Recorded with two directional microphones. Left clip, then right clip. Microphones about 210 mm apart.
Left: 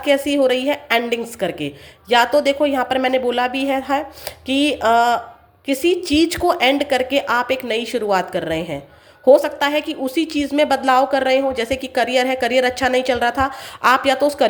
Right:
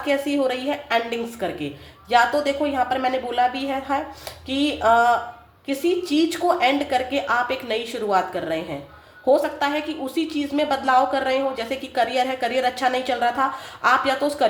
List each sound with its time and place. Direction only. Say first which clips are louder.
0.0 s a woman's voice: left 6 dB; 35° left (ahead or behind)